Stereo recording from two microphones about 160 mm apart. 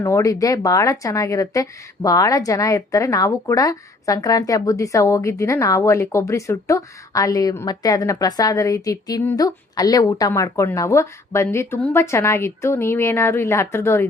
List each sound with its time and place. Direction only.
0.0 s a woman's voice: 20° left (ahead or behind)